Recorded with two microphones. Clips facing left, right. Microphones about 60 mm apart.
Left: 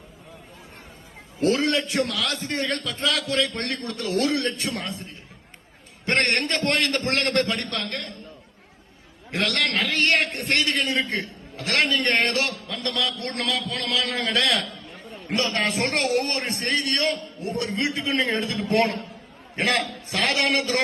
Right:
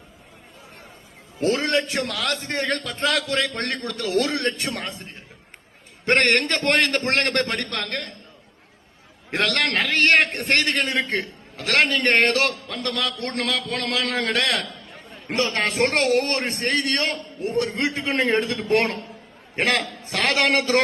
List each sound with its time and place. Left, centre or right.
1.4 s a man's voice: right
2.0 s a man's voice: right
3.8 s a man's voice: right
4.3 s a man's voice: right
6.1 s a man's voice: right
9.3 s a man's voice: right
10.8 s a man's voice: right
11.2 s a man's voice: right
20.1 s a man's voice: right
20.3 s a man's voice: right